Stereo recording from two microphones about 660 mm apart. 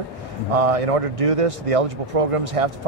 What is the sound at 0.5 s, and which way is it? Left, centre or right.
A man's voice, right.